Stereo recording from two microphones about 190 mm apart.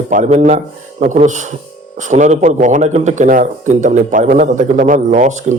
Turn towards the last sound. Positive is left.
turn(degrees=-40)  # may be behind; listen again after turning